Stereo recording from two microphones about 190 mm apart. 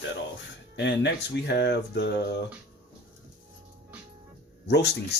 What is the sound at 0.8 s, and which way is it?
Speech, 65° left (ahead or behind).